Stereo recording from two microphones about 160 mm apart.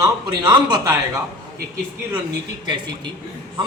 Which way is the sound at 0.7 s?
25° right (ahead or behind).